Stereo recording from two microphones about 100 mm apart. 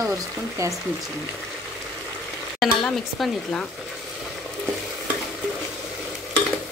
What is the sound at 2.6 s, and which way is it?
Speech, centre (ahead or behind).